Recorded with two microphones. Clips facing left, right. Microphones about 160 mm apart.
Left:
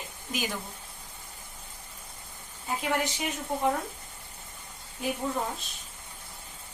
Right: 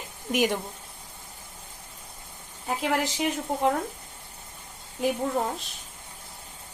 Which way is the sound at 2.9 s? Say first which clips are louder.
Right 2 dB; 90° right.